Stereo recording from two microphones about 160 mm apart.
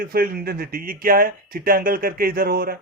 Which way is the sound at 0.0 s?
65° right (ahead or behind).